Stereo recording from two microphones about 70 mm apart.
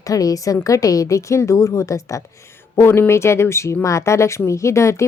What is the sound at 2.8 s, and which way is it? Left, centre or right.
A woman's voice, left.